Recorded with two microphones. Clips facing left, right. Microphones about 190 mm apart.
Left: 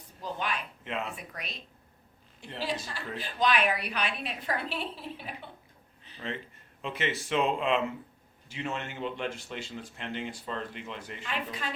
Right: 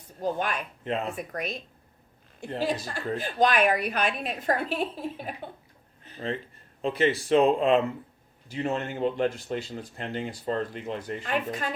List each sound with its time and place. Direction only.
0.2 s a woman's voice: 50° right (ahead or behind)
6.0 s a sound: 45° right (ahead or behind)
6.8 s speech: 35° right (ahead or behind)